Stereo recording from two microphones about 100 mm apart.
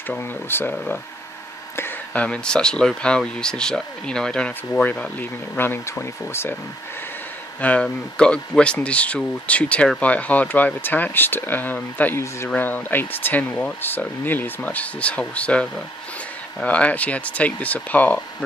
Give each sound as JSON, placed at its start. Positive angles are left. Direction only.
{"t": 0.2, "sound": "speech", "side_deg": 20}
{"t": 7.6, "sound": "speech", "side_deg": 10}